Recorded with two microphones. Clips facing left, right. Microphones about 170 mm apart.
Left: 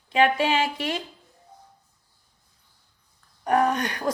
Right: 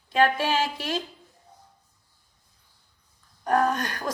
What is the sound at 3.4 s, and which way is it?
Speech, 15° left (ahead or behind).